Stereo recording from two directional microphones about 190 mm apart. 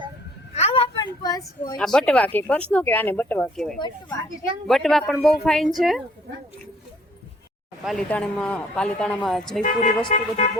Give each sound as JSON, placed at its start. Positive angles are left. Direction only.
{"t": 0.5, "sound": "a sound", "side_deg": 30}
{"t": 1.8, "sound": "speech", "side_deg": 5}
{"t": 7.9, "sound": "speech", "side_deg": 5}
{"t": 9.6, "sound": "speech", "side_deg": 40}